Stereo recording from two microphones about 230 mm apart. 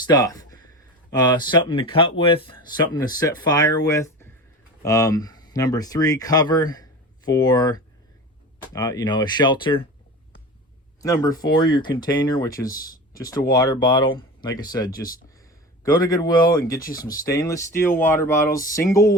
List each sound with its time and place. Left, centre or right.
0.1 s a sound: centre
1.1 s speech: centre
11.0 s speech: centre